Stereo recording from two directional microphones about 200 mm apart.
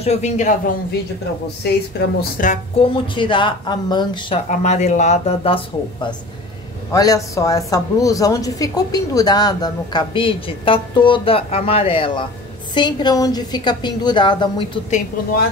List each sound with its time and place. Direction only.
0.0 s speech: 35° left (ahead or behind)
1.6 s a woman's voice: 55° left (ahead or behind)
2.5 s a woman's voice: 25° left (ahead or behind)
4.5 s a woman's voice: 35° left (ahead or behind)
14.9 s speech: 40° left (ahead or behind)